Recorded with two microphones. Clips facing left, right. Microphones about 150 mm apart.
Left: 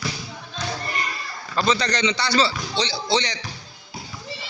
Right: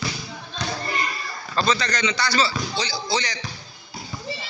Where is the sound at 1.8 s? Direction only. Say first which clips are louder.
Left 1 dB; 30° left (ahead or behind).